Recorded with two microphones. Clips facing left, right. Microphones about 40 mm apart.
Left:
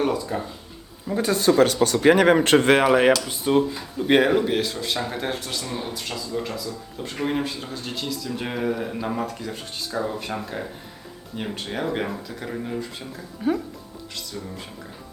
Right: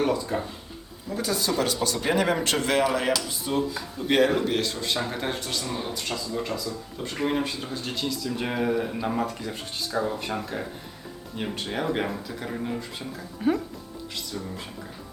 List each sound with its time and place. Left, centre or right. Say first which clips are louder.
0.3 s speech: even; centre
1.0 s speech: left 7 dB; left
3.7 s speech: left 5 dB; left; by 13.6 s centre